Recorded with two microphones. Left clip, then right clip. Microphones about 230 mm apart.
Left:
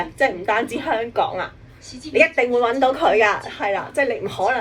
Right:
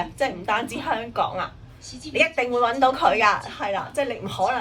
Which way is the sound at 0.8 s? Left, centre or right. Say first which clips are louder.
Left 4 dB; right.